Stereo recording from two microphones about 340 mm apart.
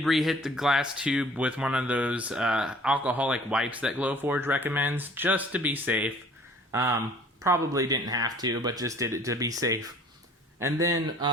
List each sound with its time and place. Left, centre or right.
0.0 s speech: centre